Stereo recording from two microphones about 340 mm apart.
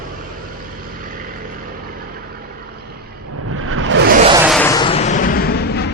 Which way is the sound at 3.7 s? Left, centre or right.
Right.